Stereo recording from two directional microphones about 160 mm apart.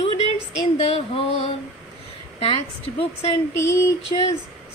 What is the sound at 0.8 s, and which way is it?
A woman's voice, 40° left (ahead or behind).